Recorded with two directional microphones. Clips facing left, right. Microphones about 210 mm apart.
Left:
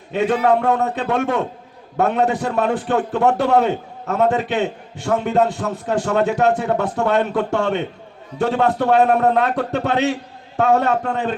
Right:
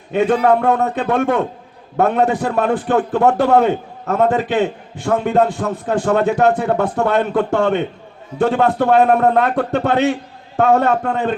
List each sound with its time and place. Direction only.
0.1 s a man's voice: 55° right (ahead or behind)